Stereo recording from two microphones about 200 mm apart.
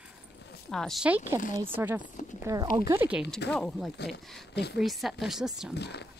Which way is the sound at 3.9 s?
55° left (ahead or behind).